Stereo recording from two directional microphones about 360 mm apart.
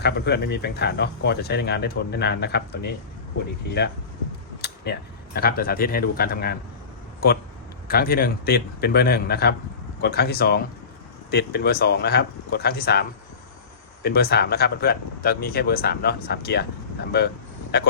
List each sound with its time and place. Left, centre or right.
0.0 s speech: left
4.6 s speech: left
7.9 s speech: left